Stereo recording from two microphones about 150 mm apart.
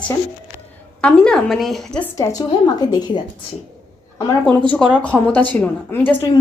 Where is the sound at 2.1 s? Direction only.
20° left (ahead or behind).